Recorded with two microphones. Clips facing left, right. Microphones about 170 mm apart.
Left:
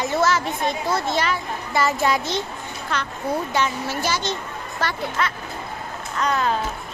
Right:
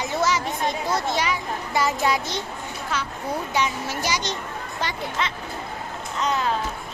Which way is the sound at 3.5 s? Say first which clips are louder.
Left 2 dB; 15° right (ahead or behind).